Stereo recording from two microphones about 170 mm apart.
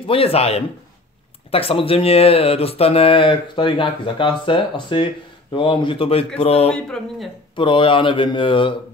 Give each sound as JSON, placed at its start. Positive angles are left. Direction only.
{"t": 0.0, "sound": "speech", "side_deg": 35}
{"t": 6.7, "sound": "speech", "side_deg": 5}
{"t": 7.5, "sound": "speech", "side_deg": 30}